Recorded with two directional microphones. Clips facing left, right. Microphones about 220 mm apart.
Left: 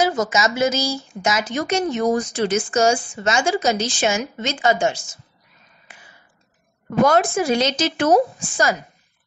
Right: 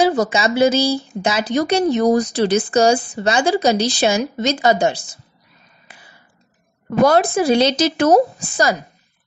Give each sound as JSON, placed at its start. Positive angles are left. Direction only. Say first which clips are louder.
{"t": 0.0, "sound": "speech", "louder": "right 3 dB", "side_deg": -30}
{"t": 5.9, "sound": "a sound", "louder": "right 2 dB", "side_deg": -35}
{"t": 7.0, "sound": "speech", "louder": "right 3 dB", "side_deg": -35}